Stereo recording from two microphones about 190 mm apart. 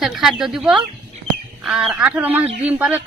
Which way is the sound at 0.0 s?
Centre (ahead or behind).